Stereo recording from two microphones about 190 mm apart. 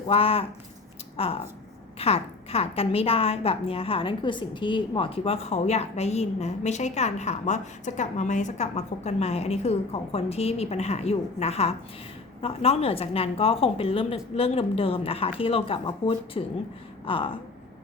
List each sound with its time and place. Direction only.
0.1 s a woman's voice: 30° left (ahead or behind)